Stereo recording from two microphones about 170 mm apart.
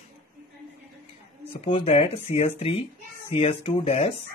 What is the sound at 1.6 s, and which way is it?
Speech, 35° left (ahead or behind).